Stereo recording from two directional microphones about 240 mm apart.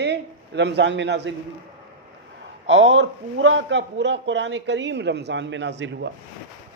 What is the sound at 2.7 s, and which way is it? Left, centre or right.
A woman's voice, right.